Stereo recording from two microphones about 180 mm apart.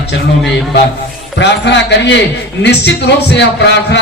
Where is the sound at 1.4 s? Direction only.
75° left (ahead or behind).